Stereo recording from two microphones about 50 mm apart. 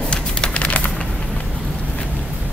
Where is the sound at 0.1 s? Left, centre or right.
Left.